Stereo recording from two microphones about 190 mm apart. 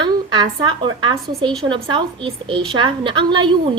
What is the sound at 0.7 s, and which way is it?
A woman's voice, 25° right (ahead or behind).